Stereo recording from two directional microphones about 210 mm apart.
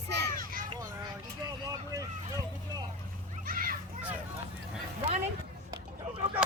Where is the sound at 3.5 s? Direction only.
40° right (ahead or behind).